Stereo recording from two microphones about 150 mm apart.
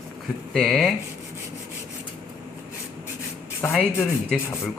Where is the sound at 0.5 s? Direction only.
Centre (ahead or behind).